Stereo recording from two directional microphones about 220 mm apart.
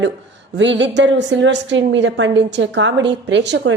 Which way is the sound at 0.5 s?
55° right (ahead or behind).